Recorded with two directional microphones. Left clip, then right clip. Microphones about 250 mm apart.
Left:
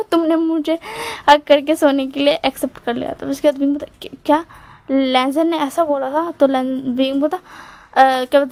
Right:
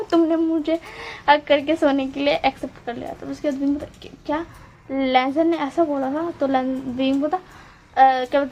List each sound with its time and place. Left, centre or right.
0.1 s speech: left